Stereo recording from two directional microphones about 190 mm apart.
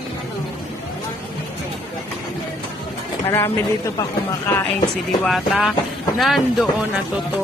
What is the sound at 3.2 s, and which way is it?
Speech, 10° left (ahead or behind).